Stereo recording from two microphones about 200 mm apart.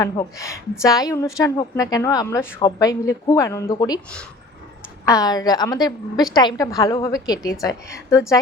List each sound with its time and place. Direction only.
0.0 s a woman's voice: 15° left (ahead or behind)
5.0 s a woman's voice: 20° left (ahead or behind)